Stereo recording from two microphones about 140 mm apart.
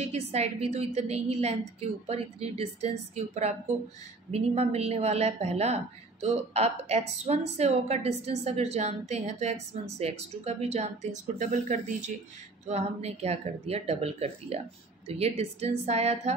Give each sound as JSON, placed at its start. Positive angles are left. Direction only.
{"t": 0.0, "sound": "speech", "side_deg": -50}